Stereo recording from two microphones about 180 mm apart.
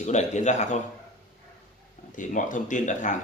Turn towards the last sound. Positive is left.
turn(degrees=45)  # may be behind; listen again after turning